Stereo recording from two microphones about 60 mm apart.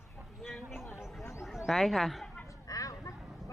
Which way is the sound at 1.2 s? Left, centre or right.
Left.